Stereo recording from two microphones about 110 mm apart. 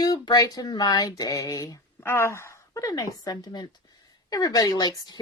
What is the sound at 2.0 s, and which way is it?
A woman's voice, 25° left (ahead or behind).